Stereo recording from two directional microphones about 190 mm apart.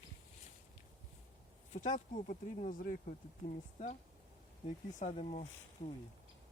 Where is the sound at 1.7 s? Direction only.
40° left (ahead or behind).